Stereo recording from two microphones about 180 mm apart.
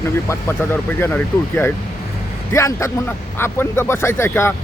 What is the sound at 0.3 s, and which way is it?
Speech, 10° left (ahead or behind).